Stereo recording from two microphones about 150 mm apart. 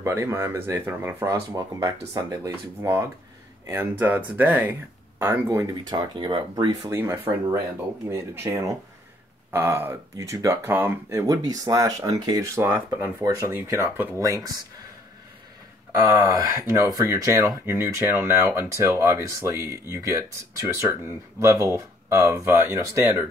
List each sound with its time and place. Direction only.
0.0 s speech: 20° right (ahead or behind)
16.0 s speech: 20° right (ahead or behind)